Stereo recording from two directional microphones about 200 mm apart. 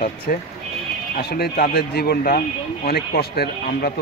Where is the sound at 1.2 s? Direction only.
55° left (ahead or behind).